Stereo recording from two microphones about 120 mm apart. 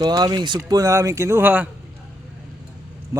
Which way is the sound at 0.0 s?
35° right (ahead or behind).